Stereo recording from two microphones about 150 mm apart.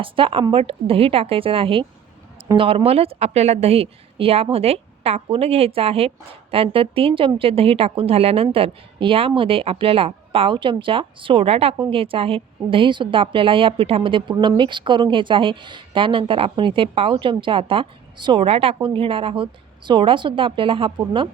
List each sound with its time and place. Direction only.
0.0 s a woman's voice: 35° right (ahead or behind)